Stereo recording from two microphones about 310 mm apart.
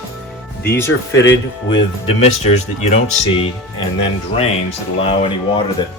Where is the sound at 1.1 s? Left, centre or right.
Left.